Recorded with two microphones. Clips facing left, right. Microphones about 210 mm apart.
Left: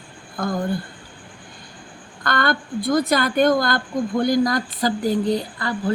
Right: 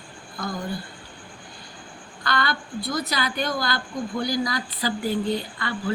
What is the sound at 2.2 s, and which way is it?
A woman's voice, 50° left (ahead or behind).